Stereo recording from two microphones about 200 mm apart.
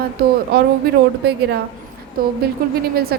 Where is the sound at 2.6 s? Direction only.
45° right (ahead or behind).